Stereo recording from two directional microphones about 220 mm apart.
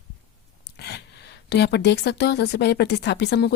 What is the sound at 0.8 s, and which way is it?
Speech, 50° left (ahead or behind).